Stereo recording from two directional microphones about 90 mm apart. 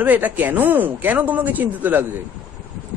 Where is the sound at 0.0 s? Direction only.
20° right (ahead or behind).